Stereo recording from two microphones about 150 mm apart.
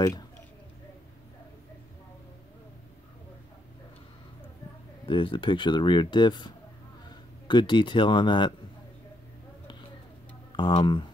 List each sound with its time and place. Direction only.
5.0 s speech: 35° left (ahead or behind)
10.5 s speech: 35° left (ahead or behind)